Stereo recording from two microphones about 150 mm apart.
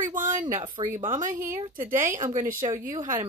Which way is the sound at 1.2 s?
60° right (ahead or behind).